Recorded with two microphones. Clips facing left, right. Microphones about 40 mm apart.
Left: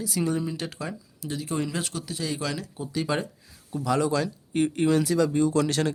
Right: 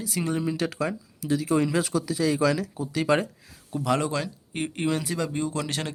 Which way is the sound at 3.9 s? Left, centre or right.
Right.